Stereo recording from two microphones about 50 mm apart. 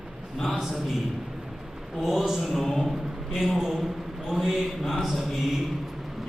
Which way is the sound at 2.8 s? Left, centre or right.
Centre.